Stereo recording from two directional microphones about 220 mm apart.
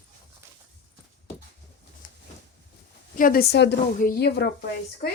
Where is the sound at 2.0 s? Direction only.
35° left (ahead or behind).